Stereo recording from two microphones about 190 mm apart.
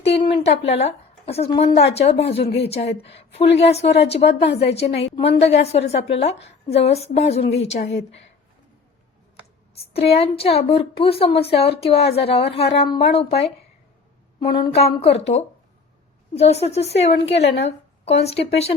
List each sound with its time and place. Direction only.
0.0 s a woman's voice: 30° left (ahead or behind)
9.8 s a woman's voice: 30° left (ahead or behind)
14.5 s a woman's voice: 30° left (ahead or behind)